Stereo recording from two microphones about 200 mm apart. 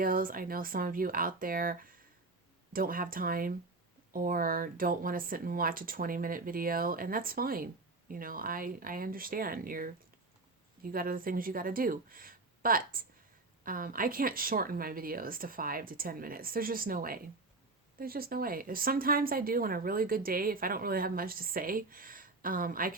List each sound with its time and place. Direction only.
0.0 s speech: 45° right (ahead or behind)